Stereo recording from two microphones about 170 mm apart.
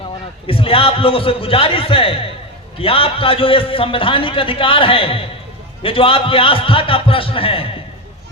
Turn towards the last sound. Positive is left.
turn(degrees=35)  # may be behind; listen again after turning